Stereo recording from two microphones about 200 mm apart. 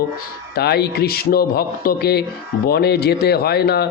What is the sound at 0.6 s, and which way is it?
Speech, 55° left (ahead or behind).